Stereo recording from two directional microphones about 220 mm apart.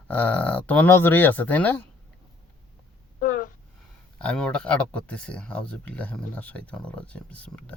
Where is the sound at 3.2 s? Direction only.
40° left (ahead or behind).